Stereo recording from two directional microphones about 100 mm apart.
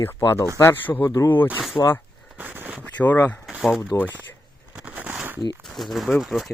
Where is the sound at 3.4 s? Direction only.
Centre (ahead or behind).